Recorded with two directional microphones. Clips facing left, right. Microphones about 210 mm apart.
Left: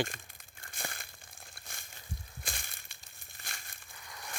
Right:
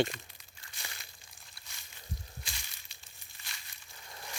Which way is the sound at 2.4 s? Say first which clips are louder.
Left 4 dB; 50° left (ahead or behind).